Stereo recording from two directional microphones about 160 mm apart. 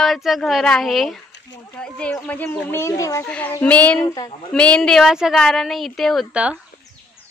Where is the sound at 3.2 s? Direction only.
10° left (ahead or behind).